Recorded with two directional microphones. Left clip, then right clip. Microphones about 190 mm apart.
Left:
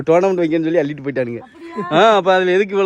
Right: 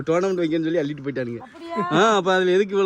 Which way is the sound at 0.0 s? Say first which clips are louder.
Left 7 dB; 10° right (ahead or behind).